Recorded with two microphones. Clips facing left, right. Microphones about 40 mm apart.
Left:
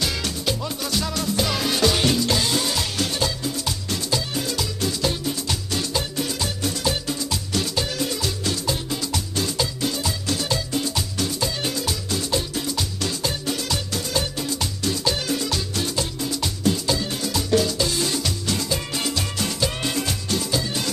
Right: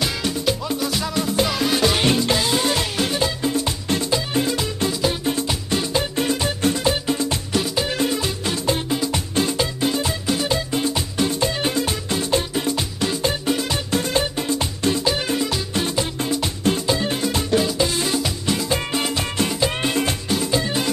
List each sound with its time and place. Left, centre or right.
0.0 s music: centre
1.5 s music: centre
2.0 s music: right
2.3 s music: centre
2.6 s music: right
3.0 s music: right
7.5 s music: centre
7.9 s music: right
18.7 s music: right